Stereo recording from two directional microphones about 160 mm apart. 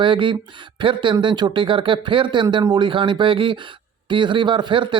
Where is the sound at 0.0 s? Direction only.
30° right (ahead or behind).